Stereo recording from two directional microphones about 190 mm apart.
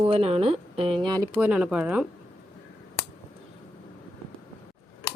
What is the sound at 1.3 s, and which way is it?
Speech, 5° right (ahead or behind).